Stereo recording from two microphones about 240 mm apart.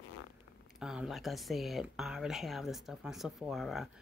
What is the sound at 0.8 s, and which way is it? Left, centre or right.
Speech, centre.